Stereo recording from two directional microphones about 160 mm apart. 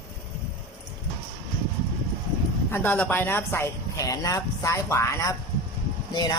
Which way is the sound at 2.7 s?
10° left (ahead or behind).